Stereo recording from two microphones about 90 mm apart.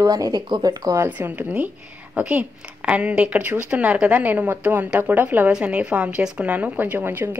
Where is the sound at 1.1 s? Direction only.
20° right (ahead or behind).